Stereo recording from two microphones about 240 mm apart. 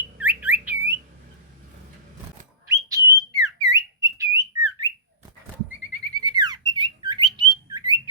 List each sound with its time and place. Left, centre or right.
0.0 s bird: centre
2.7 s whistle: centre
6.1 s squawk: centre